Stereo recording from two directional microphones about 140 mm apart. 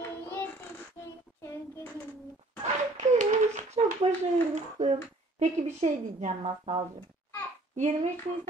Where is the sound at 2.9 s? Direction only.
60° right (ahead or behind).